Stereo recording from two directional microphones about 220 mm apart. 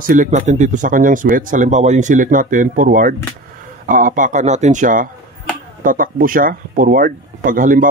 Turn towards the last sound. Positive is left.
turn(degrees=-40)  # may be behind; listen again after turning